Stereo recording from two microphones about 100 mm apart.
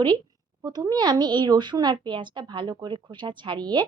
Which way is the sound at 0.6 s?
40° right (ahead or behind).